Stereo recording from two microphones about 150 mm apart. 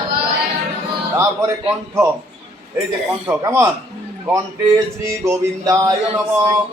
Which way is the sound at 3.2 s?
15° right (ahead or behind).